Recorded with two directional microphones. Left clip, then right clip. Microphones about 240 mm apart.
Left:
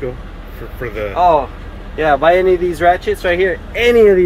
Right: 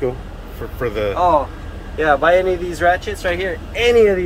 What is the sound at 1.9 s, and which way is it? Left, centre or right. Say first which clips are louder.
Speech: left 2 dB; left.